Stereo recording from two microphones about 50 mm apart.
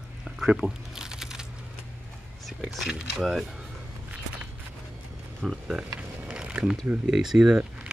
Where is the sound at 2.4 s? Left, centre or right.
Centre.